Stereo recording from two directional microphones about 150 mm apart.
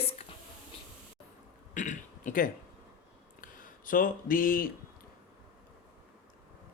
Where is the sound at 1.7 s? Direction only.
60° left (ahead or behind).